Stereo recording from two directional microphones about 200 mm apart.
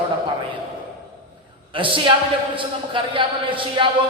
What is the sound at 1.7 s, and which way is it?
A man's voice, 25° right (ahead or behind).